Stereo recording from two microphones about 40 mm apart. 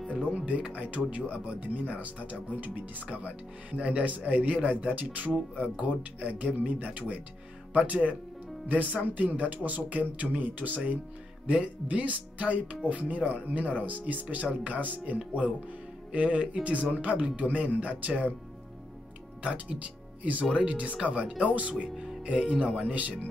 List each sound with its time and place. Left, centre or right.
0.2 s music: right
0.5 s speech: right
3.1 s speech: right
11.4 s speech: right
19.4 s speech: right
21.3 s speech: right
22.8 s speech: right